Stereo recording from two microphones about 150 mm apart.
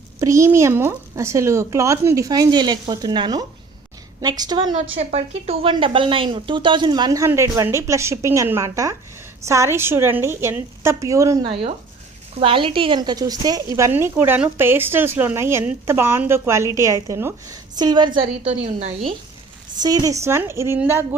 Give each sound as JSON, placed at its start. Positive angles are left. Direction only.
{"t": 0.2, "sound": "speech", "side_deg": -20}
{"t": 4.9, "sound": "speech", "side_deg": -45}
{"t": 11.4, "sound": "a woman's voice", "side_deg": -35}
{"t": 18.4, "sound": "speech", "side_deg": -45}
{"t": 19.8, "sound": "speech", "side_deg": -25}